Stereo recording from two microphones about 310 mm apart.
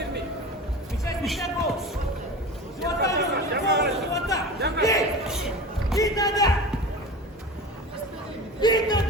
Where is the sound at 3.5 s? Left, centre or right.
Right.